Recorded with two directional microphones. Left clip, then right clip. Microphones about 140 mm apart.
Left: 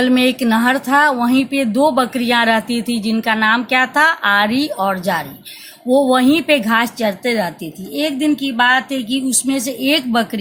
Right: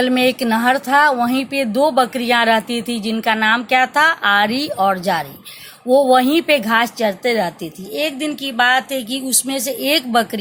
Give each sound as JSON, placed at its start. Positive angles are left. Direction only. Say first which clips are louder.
{"t": 0.0, "sound": "a woman's voice", "louder": "left 1 dB", "side_deg": -40}
{"t": 7.9, "sound": "speech", "louder": "left 3 dB", "side_deg": -70}